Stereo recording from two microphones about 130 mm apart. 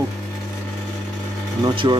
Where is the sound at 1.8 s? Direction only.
35° right (ahead or behind).